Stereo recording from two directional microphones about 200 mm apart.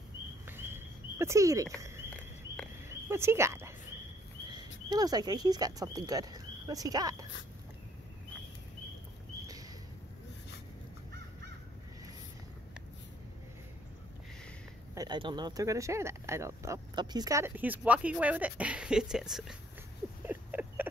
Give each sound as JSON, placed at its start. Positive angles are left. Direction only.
{"t": 0.5, "sound": "a sound", "side_deg": -10}
{"t": 2.9, "sound": "speech", "side_deg": -15}
{"t": 4.8, "sound": "speech", "side_deg": -20}
{"t": 15.0, "sound": "speech", "side_deg": -20}
{"t": 20.2, "sound": "rodents", "side_deg": -10}